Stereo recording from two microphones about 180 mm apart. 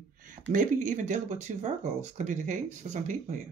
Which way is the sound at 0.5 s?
45° right (ahead or behind).